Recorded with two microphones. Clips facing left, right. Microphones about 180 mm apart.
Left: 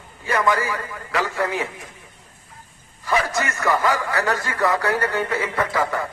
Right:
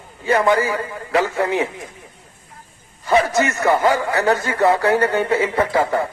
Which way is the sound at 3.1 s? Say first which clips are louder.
Right 6 dB; 25° right (ahead or behind).